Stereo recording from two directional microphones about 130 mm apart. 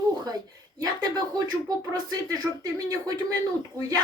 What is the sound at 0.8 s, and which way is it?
Speech, 30° right (ahead or behind).